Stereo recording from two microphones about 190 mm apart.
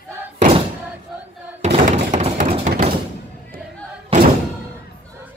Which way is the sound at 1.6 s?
35° right (ahead or behind).